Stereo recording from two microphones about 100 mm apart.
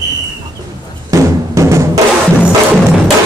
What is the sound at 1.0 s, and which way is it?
Music, 30° right (ahead or behind).